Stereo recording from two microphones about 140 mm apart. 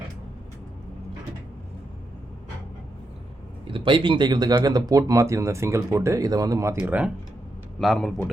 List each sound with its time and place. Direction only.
3.7 s speech: 35° right (ahead or behind)
6.7 s a man's voice: 10° right (ahead or behind)